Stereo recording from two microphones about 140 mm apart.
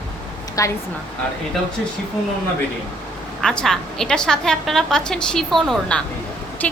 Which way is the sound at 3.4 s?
5° left (ahead or behind).